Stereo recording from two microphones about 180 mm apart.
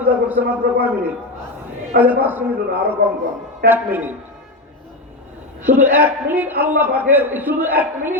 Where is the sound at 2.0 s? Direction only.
10° right (ahead or behind).